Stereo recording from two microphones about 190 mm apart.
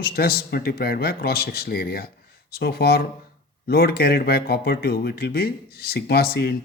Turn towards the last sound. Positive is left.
turn(degrees=55)  # may be behind; listen again after turning